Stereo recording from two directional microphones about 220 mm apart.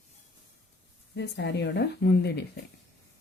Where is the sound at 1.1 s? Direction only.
50° left (ahead or behind).